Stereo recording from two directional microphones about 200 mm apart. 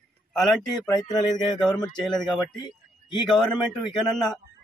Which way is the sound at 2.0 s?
Centre (ahead or behind).